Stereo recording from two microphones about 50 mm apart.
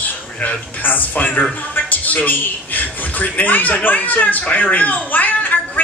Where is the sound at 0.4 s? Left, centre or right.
Left.